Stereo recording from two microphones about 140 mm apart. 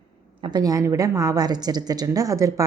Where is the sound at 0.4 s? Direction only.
30° right (ahead or behind).